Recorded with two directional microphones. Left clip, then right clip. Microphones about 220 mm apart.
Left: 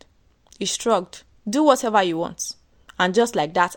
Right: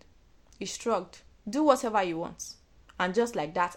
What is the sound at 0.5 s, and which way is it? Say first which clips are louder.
Speech: left 9 dB; 40° left (ahead or behind).